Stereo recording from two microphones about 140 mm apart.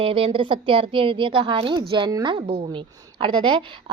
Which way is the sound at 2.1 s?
25° right (ahead or behind).